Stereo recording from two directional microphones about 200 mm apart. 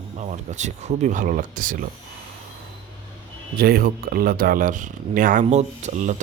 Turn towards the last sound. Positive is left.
turn(degrees=-35)  # may be behind; listen again after turning